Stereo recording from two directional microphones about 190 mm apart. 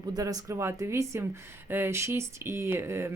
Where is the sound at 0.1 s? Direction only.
20° right (ahead or behind).